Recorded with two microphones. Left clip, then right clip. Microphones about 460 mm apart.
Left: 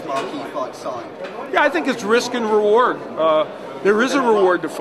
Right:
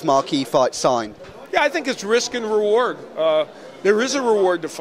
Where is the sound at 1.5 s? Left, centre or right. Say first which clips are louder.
Left 2 dB; right.